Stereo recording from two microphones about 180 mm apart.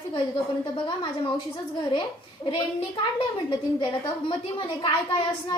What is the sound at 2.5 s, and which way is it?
A woman's voice, 25° left (ahead or behind).